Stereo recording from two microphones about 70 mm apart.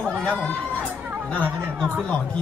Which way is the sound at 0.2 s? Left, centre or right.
Centre.